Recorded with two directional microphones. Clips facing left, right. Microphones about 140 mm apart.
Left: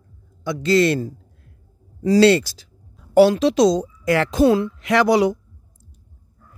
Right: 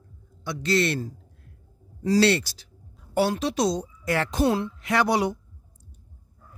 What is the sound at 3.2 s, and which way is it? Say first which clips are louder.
Speech: left 10 dB; 90° left.